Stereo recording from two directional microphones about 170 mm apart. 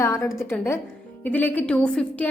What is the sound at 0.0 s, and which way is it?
A woman's voice, 15° left (ahead or behind).